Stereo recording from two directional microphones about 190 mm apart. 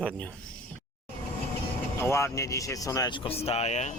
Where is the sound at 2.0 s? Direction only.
15° left (ahead or behind); by 3.9 s 40° left (ahead or behind).